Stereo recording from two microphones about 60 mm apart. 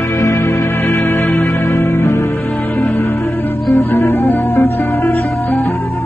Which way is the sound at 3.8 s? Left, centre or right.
Left.